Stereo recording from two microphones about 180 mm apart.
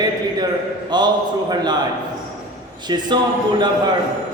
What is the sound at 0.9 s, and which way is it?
Speech, 25° right (ahead or behind).